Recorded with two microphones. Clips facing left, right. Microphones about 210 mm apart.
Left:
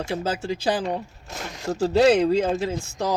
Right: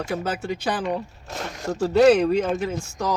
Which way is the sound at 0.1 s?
25° left (ahead or behind).